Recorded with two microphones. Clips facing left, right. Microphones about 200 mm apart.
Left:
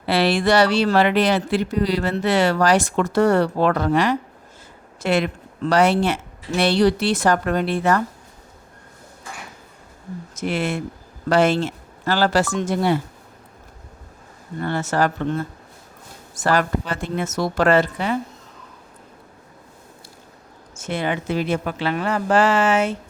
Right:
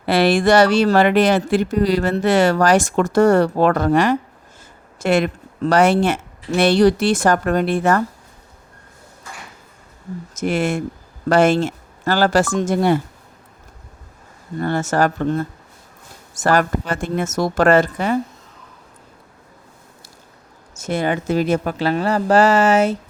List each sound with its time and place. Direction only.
0.0 s speech: 50° right (ahead or behind)
10.3 s speech: 45° right (ahead or behind)
14.6 s speech: 45° right (ahead or behind)
20.7 s speech: 40° right (ahead or behind)